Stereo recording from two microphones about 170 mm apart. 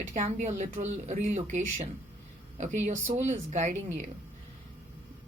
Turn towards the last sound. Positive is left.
turn(degrees=-45)  # may be behind; listen again after turning